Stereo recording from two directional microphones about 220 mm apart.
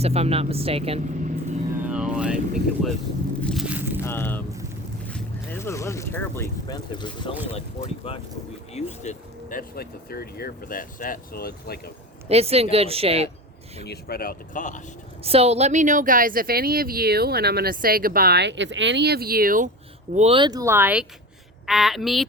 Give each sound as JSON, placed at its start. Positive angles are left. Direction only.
{"t": 0.0, "sound": "speech", "side_deg": -25}
{"t": 1.8, "sound": "music", "side_deg": -5}
{"t": 3.4, "sound": "a sound", "side_deg": 0}
{"t": 4.0, "sound": "speech", "side_deg": 10}
{"t": 7.8, "sound": "speech", "side_deg": 30}
{"t": 12.3, "sound": "speech", "side_deg": -25}
{"t": 13.8, "sound": "speech", "side_deg": 45}
{"t": 15.2, "sound": "speech", "side_deg": -25}
{"t": 20.1, "sound": "a woman's voice", "side_deg": -25}